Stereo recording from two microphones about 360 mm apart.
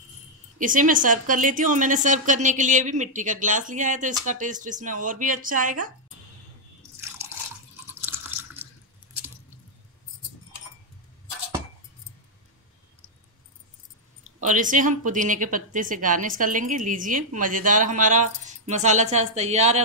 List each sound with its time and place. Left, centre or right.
0.6 s a woman's voice: right
7.2 s drip: centre
14.2 s a woman's voice: right